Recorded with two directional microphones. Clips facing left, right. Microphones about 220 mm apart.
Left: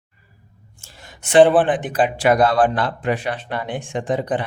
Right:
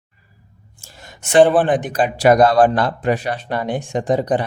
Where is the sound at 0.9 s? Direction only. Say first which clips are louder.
Right 1 dB; 45° right (ahead or behind).